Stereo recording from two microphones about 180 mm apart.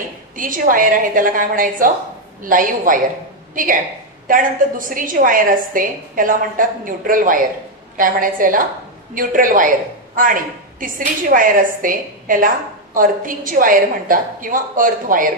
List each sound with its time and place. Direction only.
0.4 s a woman's voice: 50° right (ahead or behind)